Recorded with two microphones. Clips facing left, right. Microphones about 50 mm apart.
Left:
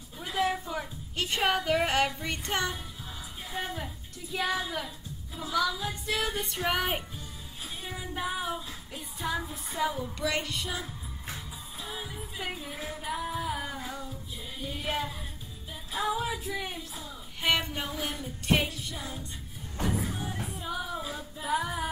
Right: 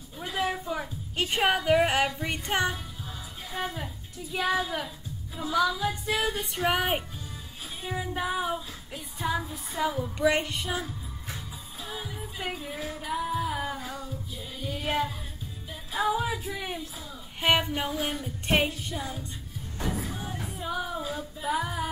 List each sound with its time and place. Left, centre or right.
0.2 s a sound: centre
3.5 s speech: centre
7.8 s female singing: centre
9.9 s child singing: right
11.8 s music: centre
15.9 s a sound: centre
17.4 s speech: centre
18.5 s music: right
18.9 s female singing: centre
19.8 s music: centre